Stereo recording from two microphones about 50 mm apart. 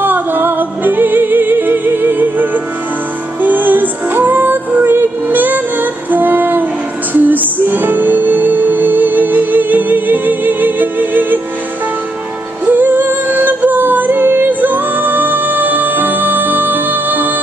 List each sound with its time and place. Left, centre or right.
0.0 s music: right
12.6 s music: right